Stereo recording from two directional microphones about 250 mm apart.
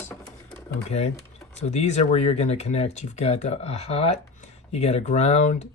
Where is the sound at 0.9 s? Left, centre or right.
Left.